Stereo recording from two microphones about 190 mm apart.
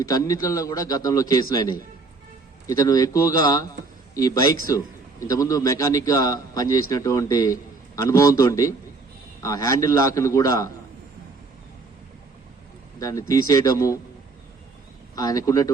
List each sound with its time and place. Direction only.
0.0 s a man's voice: 20° left (ahead or behind)
13.0 s a man's voice: 15° left (ahead or behind)
15.1 s a man's voice: 20° left (ahead or behind)